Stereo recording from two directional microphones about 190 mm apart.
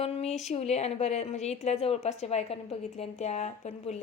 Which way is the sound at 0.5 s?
35° left (ahead or behind).